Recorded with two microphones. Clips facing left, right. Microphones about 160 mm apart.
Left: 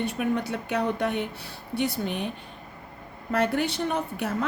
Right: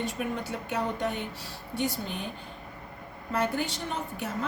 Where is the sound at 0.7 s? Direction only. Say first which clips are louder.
Left 4 dB; 70° left (ahead or behind).